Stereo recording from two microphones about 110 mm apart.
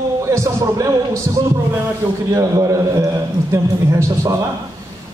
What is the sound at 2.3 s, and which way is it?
A man's voice, 30° right (ahead or behind).